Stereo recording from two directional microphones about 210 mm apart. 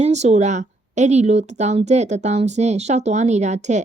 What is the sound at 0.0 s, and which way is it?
A woman's voice, 30° right (ahead or behind).